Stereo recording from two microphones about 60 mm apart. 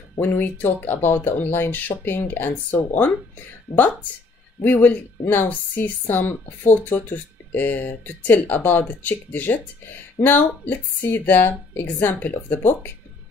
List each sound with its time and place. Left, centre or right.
0.2 s speech: left
4.6 s speech: left